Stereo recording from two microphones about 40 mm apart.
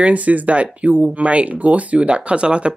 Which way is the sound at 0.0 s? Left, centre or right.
Right.